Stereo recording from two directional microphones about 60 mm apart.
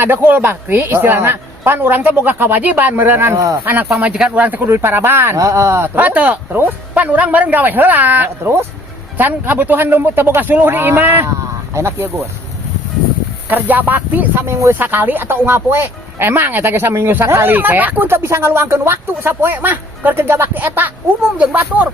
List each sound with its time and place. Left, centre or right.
0.0 s a woman's voice: right
3.9 s speech: centre
4.4 s music: right
4.7 s a woman's voice: right
5.4 s speech: right
6.0 s music: right
6.5 s a woman's voice: right
11.7 s speech: right
13.5 s music: right
14.4 s a woman's voice: right
17.5 s a woman's voice: right
18.2 s a woman's voice: right
21.3 s music: right